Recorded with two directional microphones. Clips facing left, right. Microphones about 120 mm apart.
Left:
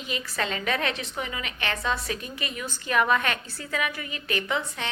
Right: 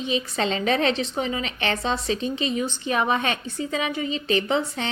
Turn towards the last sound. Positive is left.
turn(degrees=-30)  # may be behind; listen again after turning